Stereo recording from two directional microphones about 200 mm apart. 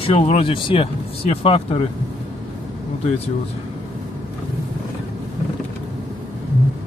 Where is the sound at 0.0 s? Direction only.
30° left (ahead or behind).